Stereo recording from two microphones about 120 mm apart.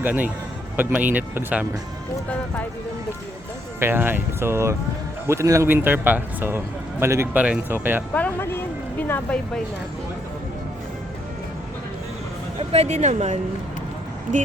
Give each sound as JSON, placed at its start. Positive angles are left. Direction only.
{"t": 0.0, "sound": "speech", "side_deg": -15}
{"t": 3.8, "sound": "speech", "side_deg": -20}
{"t": 8.1, "sound": "speech", "side_deg": 15}
{"t": 12.5, "sound": "speech", "side_deg": -60}